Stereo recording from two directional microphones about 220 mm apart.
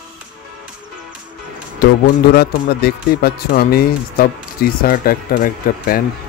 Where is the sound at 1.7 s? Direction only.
45° left (ahead or behind).